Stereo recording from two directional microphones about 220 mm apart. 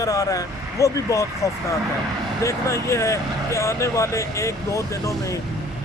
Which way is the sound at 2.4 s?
15° left (ahead or behind).